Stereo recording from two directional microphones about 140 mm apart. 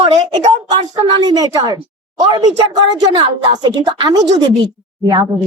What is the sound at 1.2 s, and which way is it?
A woman's voice, 30° right (ahead or behind).